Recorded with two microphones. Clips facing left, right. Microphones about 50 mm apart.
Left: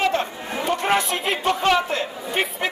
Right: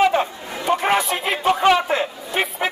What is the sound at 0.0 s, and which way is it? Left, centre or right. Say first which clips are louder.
Chatter: right 4 dB; centre.